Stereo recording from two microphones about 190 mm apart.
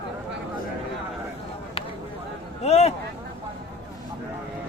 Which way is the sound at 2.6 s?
35° left (ahead or behind).